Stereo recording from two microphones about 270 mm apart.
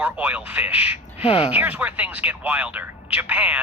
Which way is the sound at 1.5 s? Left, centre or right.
Centre.